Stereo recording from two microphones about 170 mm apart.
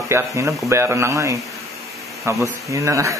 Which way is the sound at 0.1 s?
15° right (ahead or behind).